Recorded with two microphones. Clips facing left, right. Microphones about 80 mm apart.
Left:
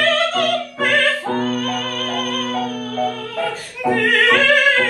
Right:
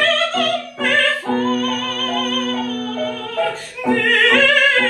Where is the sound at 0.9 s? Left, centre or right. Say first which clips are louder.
Right 1 dB; centre.